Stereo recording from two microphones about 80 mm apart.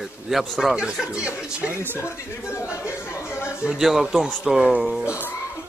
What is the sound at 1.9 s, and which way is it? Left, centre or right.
Speech, left.